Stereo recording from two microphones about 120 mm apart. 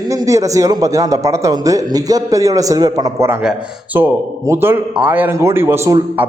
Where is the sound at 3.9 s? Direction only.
20° right (ahead or behind).